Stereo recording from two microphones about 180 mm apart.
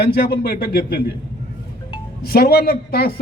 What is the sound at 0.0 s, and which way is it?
Speech, 60° left (ahead or behind).